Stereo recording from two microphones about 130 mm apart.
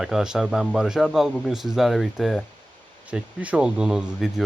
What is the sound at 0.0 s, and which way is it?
Speech, 5° right (ahead or behind).